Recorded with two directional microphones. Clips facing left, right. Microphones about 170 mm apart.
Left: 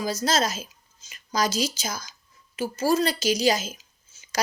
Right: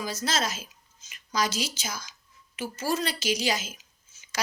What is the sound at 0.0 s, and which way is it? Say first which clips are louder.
A woman's voice: left 5 dB; 40° left (ahead or behind).